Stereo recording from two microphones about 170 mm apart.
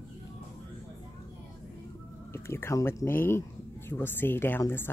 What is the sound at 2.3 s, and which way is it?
Speech, 15° left (ahead or behind).